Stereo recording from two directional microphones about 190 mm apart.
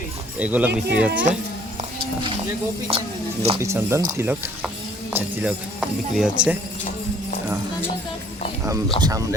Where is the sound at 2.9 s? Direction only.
30° right (ahead or behind).